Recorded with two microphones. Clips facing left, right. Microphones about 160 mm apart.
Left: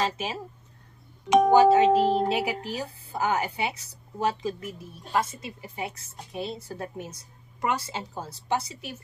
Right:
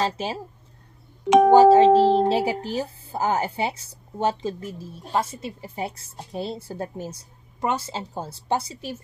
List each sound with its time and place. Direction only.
0.0 s speech: 30° right (ahead or behind)
1.5 s speech: 30° right (ahead or behind)